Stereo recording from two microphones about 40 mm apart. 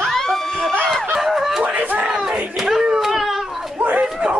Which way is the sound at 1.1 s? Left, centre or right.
Centre.